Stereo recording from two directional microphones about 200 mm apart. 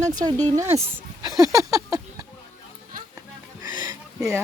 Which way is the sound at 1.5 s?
15° right (ahead or behind).